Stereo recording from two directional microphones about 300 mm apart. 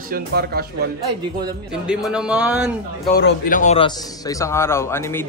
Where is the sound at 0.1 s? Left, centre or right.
Right.